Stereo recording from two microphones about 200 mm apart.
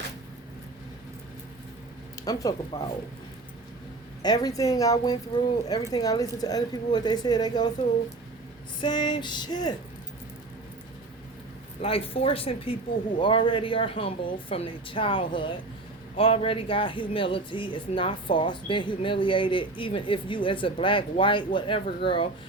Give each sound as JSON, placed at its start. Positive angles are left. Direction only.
{"t": 2.2, "sound": "speech", "side_deg": 20}
{"t": 4.2, "sound": "a woman's voice", "side_deg": 20}
{"t": 8.8, "sound": "speech", "side_deg": 20}
{"t": 11.8, "sound": "speech", "side_deg": 30}